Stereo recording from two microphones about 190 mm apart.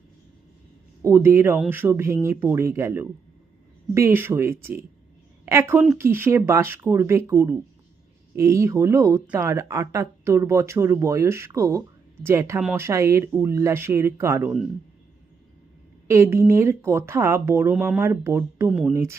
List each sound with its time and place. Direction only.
1.0 s speech: 15° right (ahead or behind)
16.0 s speech: 15° right (ahead or behind)